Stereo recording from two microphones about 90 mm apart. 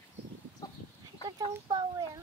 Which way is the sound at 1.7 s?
45° right (ahead or behind).